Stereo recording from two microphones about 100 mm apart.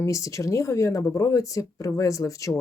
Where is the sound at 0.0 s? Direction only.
30° left (ahead or behind).